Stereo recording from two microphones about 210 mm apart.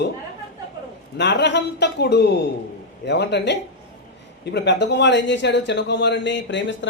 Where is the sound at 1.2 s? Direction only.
55° left (ahead or behind).